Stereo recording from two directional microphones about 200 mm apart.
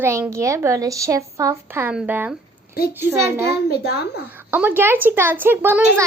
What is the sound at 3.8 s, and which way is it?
Speech, 55° left (ahead or behind).